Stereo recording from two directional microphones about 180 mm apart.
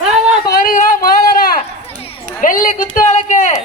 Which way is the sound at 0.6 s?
50° left (ahead or behind).